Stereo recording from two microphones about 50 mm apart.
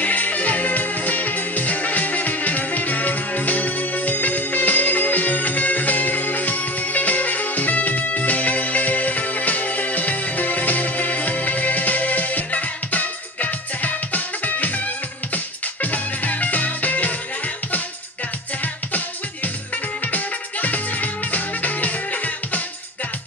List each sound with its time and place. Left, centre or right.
0.0 s music: left
18.6 s music: left